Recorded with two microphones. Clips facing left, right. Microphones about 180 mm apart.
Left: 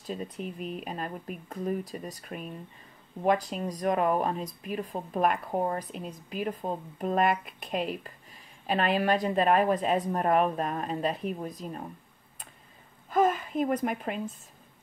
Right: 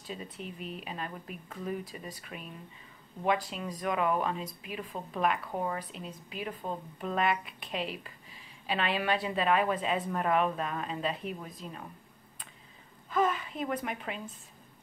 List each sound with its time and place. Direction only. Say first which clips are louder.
0.0 s speech: left 6 dB; 45° left (ahead or behind)
13.1 s speech: left 4 dB; 45° left (ahead or behind)